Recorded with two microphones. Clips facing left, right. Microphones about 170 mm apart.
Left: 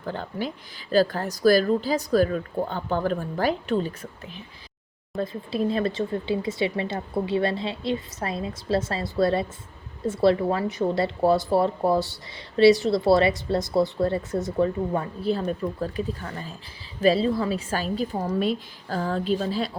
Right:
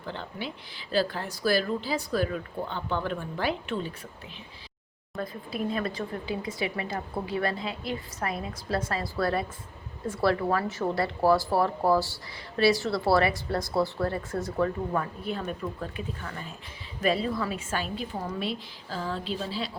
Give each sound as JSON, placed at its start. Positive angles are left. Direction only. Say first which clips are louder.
{"t": 0.0, "sound": "a woman's voice", "louder": "left 6 dB", "side_deg": 45}
{"t": 5.1, "sound": "a woman's voice", "louder": "left 6 dB", "side_deg": 25}